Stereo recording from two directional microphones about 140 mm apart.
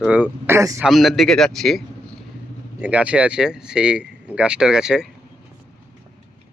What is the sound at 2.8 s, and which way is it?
Speech, 10° right (ahead or behind).